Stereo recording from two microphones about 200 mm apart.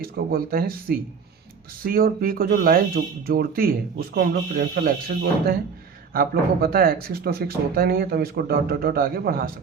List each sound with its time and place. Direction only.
0.0 s speech: 50° right (ahead or behind)